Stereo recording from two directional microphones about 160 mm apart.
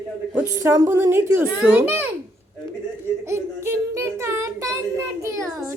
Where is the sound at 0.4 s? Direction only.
20° right (ahead or behind).